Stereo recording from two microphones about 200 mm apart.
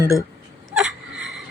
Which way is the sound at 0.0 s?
15° left (ahead or behind).